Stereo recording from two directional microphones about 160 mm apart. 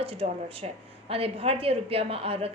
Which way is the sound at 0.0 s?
35° right (ahead or behind).